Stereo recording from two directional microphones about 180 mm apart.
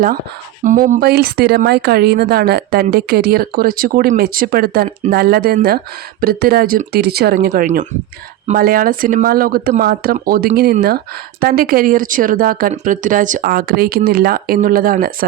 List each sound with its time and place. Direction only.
0.6 s speech: 45° right (ahead or behind); by 7.5 s 60° right (ahead or behind)
7.5 s a woman's voice: 45° right (ahead or behind)